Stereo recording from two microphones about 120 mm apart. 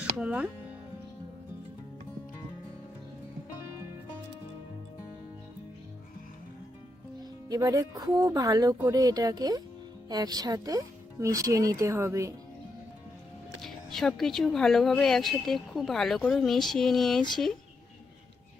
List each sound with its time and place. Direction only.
0.0 s speech: 10° right (ahead or behind)
7.2 s speech: 30° right (ahead or behind)
13.6 s speech: 5° left (ahead or behind)